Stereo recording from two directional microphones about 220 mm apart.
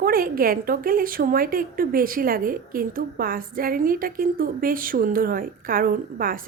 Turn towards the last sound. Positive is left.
turn(degrees=-40)  # may be behind; listen again after turning